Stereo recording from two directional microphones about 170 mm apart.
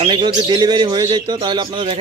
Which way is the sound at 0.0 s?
25° right (ahead or behind).